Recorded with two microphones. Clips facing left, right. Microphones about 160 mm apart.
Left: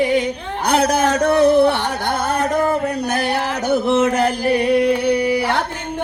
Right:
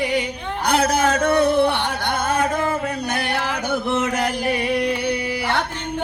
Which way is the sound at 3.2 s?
40° left (ahead or behind).